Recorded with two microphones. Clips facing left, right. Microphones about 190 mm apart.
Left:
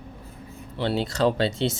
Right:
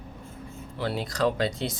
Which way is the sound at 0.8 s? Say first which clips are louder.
Left 4 dB; 25° left (ahead or behind).